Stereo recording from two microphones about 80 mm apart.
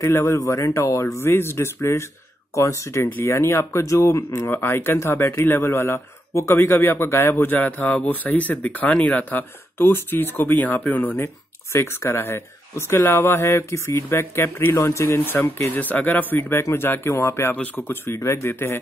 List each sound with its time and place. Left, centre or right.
0.0 s speech: left
11.7 s speech: left